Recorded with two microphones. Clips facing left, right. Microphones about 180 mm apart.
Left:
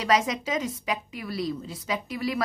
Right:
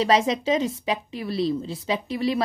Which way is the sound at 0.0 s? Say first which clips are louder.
Right 4 dB; 30° right (ahead or behind).